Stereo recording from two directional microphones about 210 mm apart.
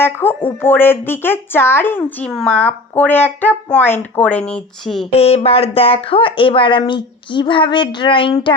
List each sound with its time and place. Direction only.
0.0 s a woman's voice: 10° left (ahead or behind)
5.1 s speech: 30° left (ahead or behind)